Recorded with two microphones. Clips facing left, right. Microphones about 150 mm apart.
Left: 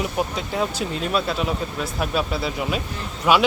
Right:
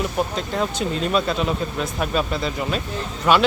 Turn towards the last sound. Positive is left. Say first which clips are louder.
# right 1 dB
turn(degrees=10)  # may be behind; listen again after turning